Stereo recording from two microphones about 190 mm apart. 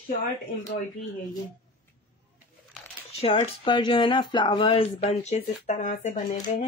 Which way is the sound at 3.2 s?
30° left (ahead or behind).